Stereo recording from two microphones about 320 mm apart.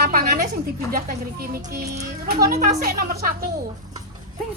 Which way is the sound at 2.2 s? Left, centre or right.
Right.